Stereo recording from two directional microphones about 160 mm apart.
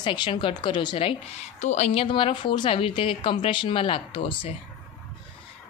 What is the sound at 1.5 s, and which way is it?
A woman's voice, 45° left (ahead or behind).